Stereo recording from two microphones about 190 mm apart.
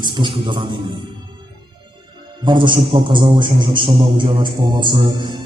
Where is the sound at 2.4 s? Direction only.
25° right (ahead or behind).